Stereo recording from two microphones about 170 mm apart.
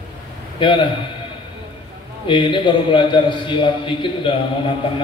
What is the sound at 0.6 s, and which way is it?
Speech, 30° left (ahead or behind).